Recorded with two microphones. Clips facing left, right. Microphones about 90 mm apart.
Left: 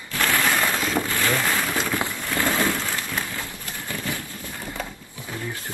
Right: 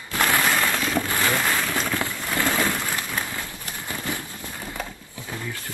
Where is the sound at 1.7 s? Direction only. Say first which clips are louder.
Left 1 dB; 20° left (ahead or behind).